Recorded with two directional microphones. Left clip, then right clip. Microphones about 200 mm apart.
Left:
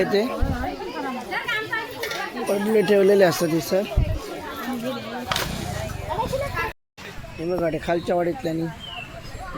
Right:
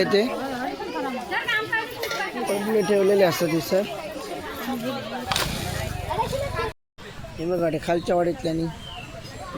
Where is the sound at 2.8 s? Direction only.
40° left (ahead or behind); by 3.9 s 10° left (ahead or behind).